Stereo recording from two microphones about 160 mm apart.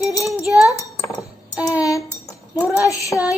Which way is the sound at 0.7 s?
20° left (ahead or behind).